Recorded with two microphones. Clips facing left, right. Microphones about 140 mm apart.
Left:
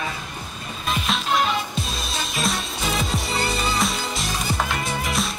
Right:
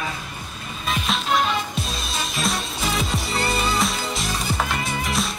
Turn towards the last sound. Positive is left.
turn(degrees=0)  # may be behind; listen again after turning